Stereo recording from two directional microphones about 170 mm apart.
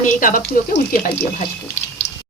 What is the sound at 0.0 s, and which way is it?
Speech, 55° left (ahead or behind).